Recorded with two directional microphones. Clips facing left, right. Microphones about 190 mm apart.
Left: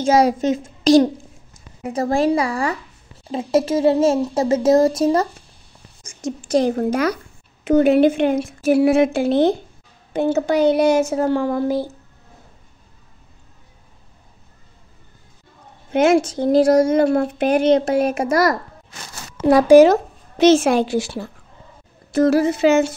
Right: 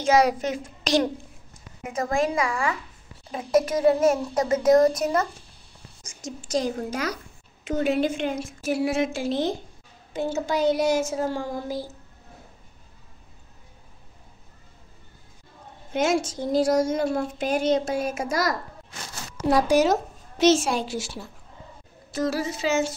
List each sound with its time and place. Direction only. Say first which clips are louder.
0.0 s a child's voice: left 5 dB; 30° left (ahead or behind)
6.0 s speech: left 10 dB; 60° left (ahead or behind)
15.9 s speech: left 8 dB; 60° left (ahead or behind)